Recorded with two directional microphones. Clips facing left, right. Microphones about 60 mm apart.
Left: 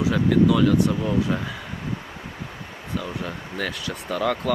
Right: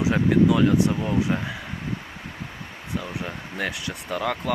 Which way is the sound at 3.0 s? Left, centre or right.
Centre.